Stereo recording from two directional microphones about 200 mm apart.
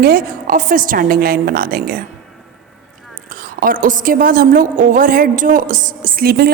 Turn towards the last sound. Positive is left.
turn(degrees=-45)  # may be behind; listen again after turning